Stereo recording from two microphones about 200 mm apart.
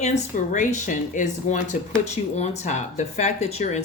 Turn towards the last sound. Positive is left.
turn(degrees=35)  # may be behind; listen again after turning